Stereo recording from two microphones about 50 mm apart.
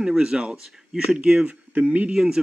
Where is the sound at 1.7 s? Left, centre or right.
Right.